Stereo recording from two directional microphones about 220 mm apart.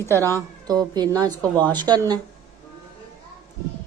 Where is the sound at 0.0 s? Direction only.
10° left (ahead or behind).